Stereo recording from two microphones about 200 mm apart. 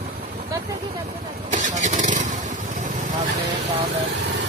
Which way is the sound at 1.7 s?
35° right (ahead or behind).